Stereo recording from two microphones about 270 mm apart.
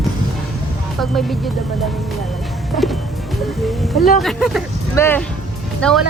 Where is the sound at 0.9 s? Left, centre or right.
Centre.